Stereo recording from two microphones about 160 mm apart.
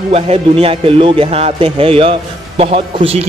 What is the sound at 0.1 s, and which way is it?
Speech, 35° right (ahead or behind).